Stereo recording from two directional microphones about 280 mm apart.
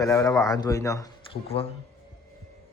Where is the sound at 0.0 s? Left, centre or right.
Centre.